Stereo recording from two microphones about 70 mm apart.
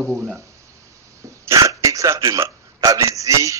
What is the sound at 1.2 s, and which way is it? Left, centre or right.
Hiccup, right.